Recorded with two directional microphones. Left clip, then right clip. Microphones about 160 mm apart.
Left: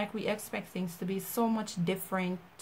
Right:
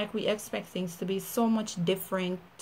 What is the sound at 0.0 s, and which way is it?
Speech, 10° left (ahead or behind).